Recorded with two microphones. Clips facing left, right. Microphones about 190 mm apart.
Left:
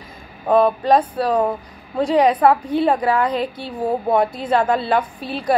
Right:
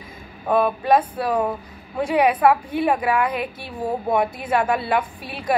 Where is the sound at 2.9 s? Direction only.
35° left (ahead or behind).